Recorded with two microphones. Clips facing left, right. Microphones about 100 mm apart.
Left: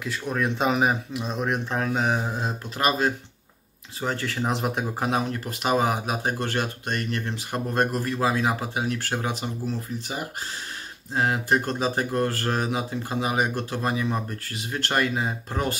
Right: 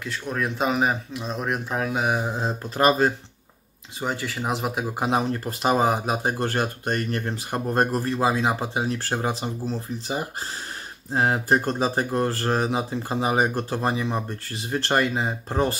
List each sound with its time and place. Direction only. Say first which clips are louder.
0.0 s speech: left 1 dB; centre (ahead or behind)
4.0 s speech: even; 10° right (ahead or behind)
4.9 s speech: right 2 dB; 25° right (ahead or behind)
6.4 s speech: right 3 dB; 40° right (ahead or behind)
13.9 s speech: even; 20° right (ahead or behind)